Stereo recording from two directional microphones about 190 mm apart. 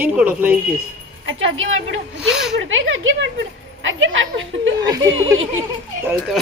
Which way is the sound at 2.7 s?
90° right.